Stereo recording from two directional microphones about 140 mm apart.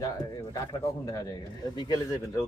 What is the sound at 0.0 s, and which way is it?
Speech, 25° left (ahead or behind).